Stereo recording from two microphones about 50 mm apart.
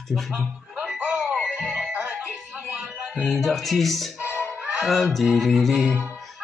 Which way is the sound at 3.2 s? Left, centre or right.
Centre.